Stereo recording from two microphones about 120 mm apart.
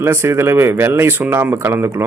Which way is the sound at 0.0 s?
20° right (ahead or behind).